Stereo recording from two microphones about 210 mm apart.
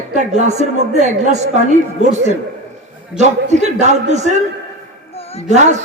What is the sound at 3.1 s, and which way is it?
A woman's voice, 35° right (ahead or behind).